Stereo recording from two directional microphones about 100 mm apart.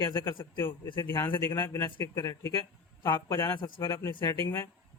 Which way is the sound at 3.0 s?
50° left (ahead or behind).